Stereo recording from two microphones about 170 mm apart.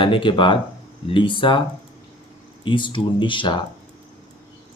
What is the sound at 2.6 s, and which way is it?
Speech, 30° left (ahead or behind).